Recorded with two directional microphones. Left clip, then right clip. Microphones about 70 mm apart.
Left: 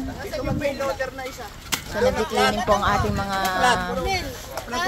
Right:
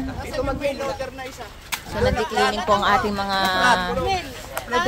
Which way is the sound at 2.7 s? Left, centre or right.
Right.